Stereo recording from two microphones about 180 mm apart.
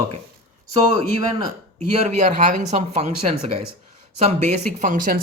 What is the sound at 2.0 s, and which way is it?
Speech, 45° right (ahead or behind).